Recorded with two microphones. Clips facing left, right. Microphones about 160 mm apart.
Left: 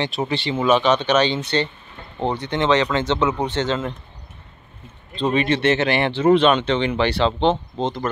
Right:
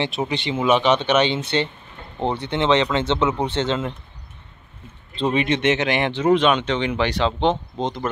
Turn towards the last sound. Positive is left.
turn(degrees=-15)  # may be behind; listen again after turning